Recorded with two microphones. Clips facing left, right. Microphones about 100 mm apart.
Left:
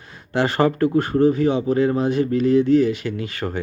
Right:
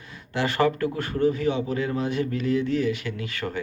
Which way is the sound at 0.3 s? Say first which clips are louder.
Left 5 dB; 30° left (ahead or behind).